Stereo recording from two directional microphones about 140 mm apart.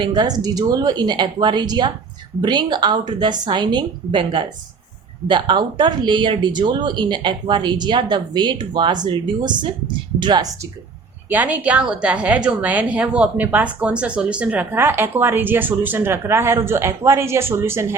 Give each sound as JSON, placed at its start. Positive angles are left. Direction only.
{"t": 0.0, "sound": "speech", "side_deg": -30}
{"t": 11.3, "sound": "a woman's voice", "side_deg": -10}